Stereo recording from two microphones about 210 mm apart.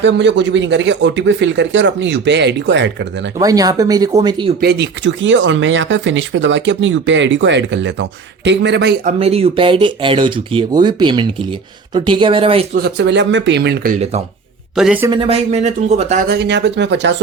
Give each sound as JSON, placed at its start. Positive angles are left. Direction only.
{"t": 0.0, "sound": "speech", "side_deg": -60}
{"t": 3.3, "sound": "speech", "side_deg": -15}
{"t": 4.6, "sound": "speech", "side_deg": -55}
{"t": 9.0, "sound": "speech", "side_deg": -30}
{"t": 12.7, "sound": "speech", "side_deg": -50}
{"t": 14.8, "sound": "a woman's voice", "side_deg": -5}
{"t": 15.0, "sound": "speech", "side_deg": -25}
{"t": 16.2, "sound": "speech", "side_deg": -50}